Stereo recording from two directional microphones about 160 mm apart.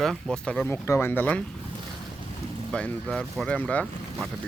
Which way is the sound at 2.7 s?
5° left (ahead or behind).